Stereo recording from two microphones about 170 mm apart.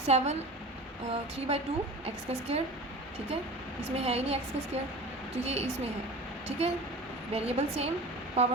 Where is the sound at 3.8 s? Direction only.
35° right (ahead or behind).